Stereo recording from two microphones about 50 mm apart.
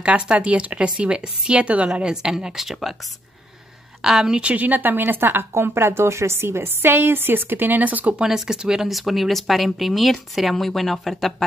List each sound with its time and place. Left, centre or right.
0.0 s a woman's voice: right; by 3.0 s centre
4.0 s speech: centre
4.4 s a woman's voice: right
4.6 s a woman's voice: right
5.5 s a woman's voice: right
8.2 s speech: centre